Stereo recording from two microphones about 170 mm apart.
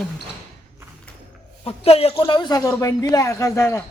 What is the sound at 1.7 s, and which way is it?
Speech, 35° left (ahead or behind).